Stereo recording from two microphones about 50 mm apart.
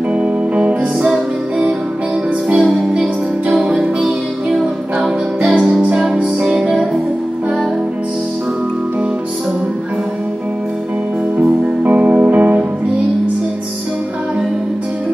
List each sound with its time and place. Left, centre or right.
0.2 s music: right
2.5 s music: centre
11.3 s music: right